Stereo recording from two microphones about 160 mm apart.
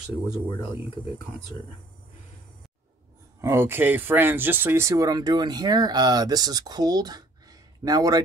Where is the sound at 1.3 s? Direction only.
40° right (ahead or behind).